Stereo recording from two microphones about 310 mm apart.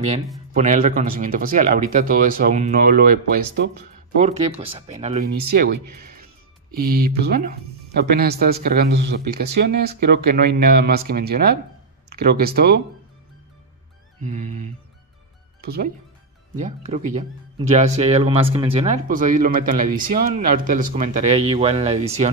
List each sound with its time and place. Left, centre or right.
0.5 s speech: right
7.2 s speech: right
14.2 s speech: right